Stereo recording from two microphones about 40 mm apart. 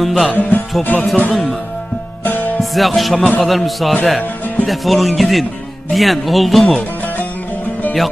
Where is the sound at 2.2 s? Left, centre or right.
Left.